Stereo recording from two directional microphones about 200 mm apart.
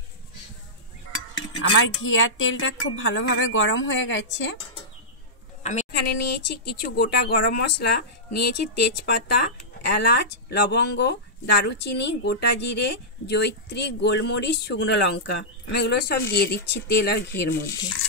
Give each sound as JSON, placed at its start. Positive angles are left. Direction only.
{"t": 1.6, "sound": "a woman's voice", "side_deg": 75}
{"t": 5.6, "sound": "a sound", "side_deg": 35}
{"t": 5.9, "sound": "speech", "side_deg": 55}
{"t": 10.5, "sound": "speech", "side_deg": 55}